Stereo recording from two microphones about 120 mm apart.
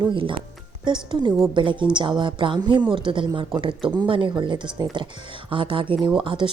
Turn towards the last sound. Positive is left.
turn(degrees=-45)  # may be behind; listen again after turning